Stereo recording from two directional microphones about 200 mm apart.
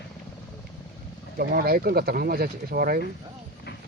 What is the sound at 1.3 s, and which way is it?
Speech, 50° right (ahead or behind).